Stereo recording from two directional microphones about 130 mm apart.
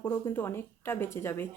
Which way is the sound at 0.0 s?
15° left (ahead or behind).